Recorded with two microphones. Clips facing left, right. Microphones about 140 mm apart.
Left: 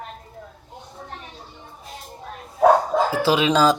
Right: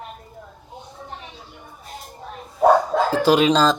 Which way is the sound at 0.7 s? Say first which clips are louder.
Right 1 dB; centre (ahead or behind).